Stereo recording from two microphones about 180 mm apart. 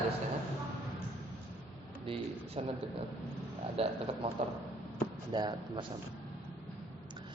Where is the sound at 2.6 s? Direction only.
35° right (ahead or behind).